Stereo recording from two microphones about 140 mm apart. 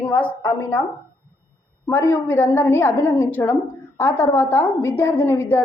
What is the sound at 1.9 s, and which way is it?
A woman's voice, 15° left (ahead or behind).